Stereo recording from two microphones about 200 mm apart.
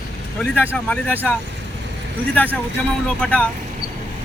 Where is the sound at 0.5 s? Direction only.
5° right (ahead or behind).